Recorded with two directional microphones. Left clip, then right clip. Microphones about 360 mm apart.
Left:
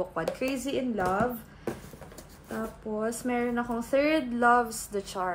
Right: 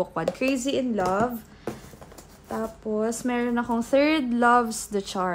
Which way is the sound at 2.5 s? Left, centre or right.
Right.